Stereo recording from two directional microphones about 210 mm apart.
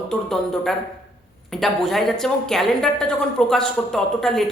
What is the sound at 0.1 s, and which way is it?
A man's voice, centre (ahead or behind).